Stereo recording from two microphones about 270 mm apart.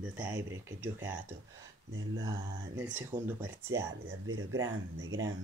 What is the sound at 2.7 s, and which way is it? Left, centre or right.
Speech, centre.